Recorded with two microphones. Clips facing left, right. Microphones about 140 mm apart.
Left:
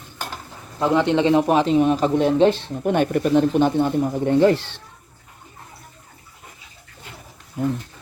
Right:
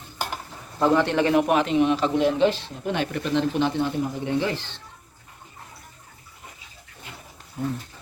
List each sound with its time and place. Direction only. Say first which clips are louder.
0.8 s speech: left 2 dB; 15° left (ahead or behind); by 4.6 s 50° left (ahead or behind)